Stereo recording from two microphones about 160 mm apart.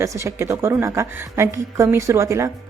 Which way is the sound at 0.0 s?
20° right (ahead or behind).